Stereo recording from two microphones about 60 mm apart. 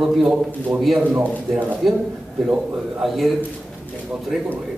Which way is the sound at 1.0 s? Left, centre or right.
Right.